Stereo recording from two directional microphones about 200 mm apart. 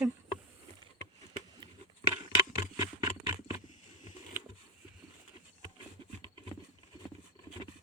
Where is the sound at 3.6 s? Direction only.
40° left (ahead or behind).